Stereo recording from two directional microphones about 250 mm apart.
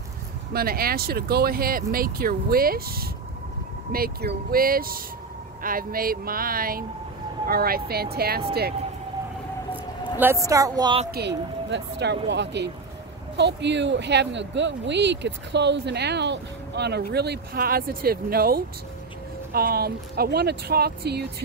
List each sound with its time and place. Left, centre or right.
0.5 s speech: right
10.4 s speech: centre
11.1 s speech: right